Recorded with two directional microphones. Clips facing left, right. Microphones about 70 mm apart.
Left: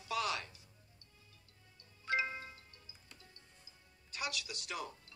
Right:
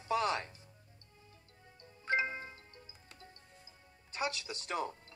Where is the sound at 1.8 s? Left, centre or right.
Right.